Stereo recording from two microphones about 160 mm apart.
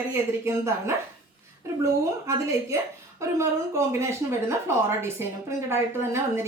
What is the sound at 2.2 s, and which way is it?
A woman's voice, 20° right (ahead or behind).